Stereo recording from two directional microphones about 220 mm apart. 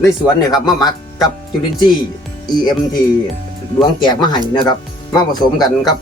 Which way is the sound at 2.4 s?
20° left (ahead or behind).